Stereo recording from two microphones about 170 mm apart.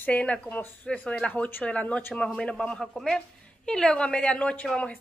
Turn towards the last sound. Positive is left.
turn(degrees=5)  # may be behind; listen again after turning